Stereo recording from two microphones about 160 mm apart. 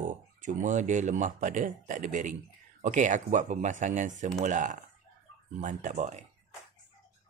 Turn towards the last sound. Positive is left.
turn(degrees=-45)  # may be behind; listen again after turning